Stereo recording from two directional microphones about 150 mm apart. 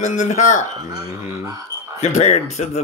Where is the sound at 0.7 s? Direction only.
25° right (ahead or behind).